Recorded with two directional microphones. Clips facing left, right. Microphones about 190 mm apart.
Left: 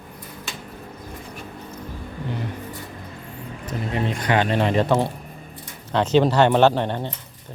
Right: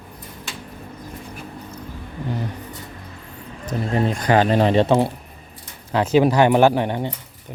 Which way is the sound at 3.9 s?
40° right (ahead or behind).